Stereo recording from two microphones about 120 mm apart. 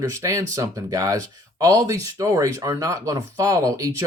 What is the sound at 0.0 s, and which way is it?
Speech, 25° right (ahead or behind).